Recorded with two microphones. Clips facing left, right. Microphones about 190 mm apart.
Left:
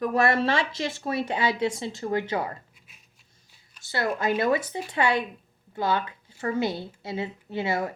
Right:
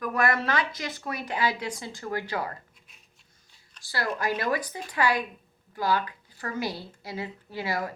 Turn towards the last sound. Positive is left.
turn(degrees=25)  # may be behind; listen again after turning